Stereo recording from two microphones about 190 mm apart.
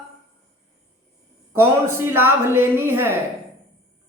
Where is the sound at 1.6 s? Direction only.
10° right (ahead or behind).